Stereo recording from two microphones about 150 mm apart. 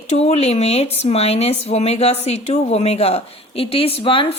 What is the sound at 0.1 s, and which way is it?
Speech, 45° left (ahead or behind).